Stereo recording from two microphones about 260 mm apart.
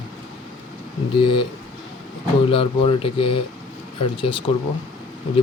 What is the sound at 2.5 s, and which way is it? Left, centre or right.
Speech, left.